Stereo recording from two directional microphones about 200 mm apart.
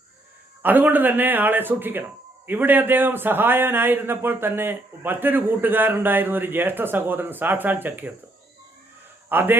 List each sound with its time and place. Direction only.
0.6 s a man's voice: 10° right (ahead or behind)
9.3 s a man's voice: 10° right (ahead or behind)